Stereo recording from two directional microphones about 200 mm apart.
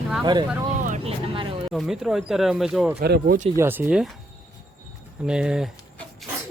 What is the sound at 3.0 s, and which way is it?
Speech, 50° right (ahead or behind).